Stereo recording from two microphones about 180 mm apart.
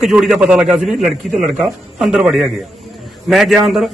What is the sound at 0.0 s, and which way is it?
A man's voice, centre (ahead or behind).